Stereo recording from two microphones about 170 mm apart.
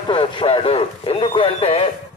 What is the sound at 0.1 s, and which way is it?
A man's voice, 30° left (ahead or behind).